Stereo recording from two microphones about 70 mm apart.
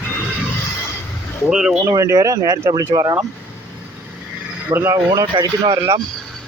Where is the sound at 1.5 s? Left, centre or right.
Centre.